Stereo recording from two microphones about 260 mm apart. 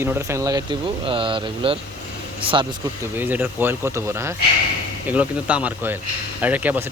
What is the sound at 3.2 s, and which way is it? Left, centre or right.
Speech, centre.